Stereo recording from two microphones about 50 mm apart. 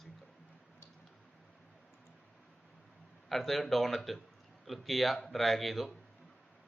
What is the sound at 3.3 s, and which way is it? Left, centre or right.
Speech, centre.